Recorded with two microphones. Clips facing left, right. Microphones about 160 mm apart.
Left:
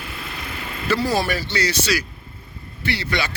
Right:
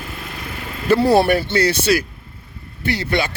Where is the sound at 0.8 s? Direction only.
55° right (ahead or behind).